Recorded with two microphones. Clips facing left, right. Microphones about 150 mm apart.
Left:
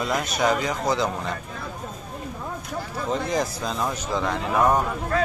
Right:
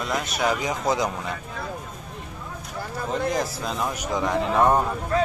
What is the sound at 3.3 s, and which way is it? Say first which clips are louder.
Speech: left 1 dB; centre (ahead or behind).